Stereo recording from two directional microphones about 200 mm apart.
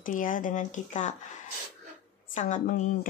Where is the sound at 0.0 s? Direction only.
40° left (ahead or behind).